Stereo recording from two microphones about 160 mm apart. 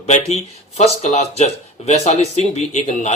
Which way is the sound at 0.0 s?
45° left (ahead or behind).